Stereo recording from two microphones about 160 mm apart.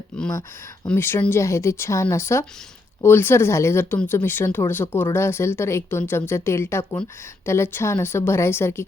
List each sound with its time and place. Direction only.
0.2 s speech: 15° left (ahead or behind)